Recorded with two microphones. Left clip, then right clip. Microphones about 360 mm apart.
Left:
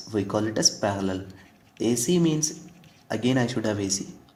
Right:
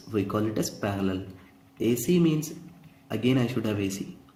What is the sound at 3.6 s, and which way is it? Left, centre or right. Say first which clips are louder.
Speech: left 3 dB; centre.